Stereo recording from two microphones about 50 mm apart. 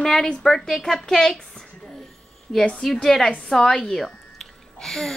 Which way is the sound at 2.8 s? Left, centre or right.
Centre.